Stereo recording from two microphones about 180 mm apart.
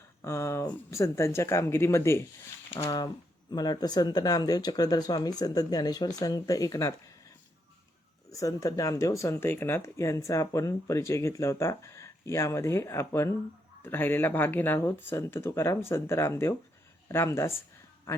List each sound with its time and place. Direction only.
0.2 s speech: 15° left (ahead or behind)
8.3 s speech: 20° left (ahead or behind)